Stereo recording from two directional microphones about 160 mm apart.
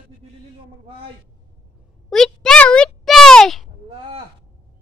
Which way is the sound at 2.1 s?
5° left (ahead or behind).